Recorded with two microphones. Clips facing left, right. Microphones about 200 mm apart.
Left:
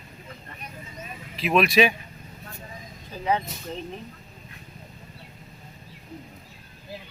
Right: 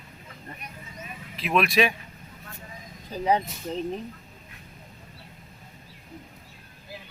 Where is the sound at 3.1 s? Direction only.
35° right (ahead or behind).